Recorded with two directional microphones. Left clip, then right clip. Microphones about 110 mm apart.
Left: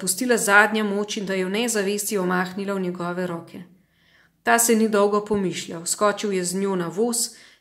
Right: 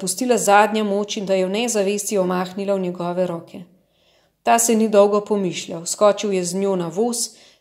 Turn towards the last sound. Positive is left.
turn(degrees=-20)  # may be behind; listen again after turning